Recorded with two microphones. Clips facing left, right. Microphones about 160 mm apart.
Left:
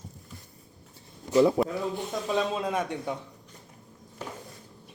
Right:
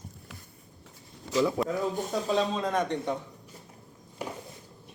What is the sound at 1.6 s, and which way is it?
Speech, 25° left (ahead or behind).